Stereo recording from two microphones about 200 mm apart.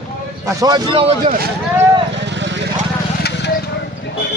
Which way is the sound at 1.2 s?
45° right (ahead or behind).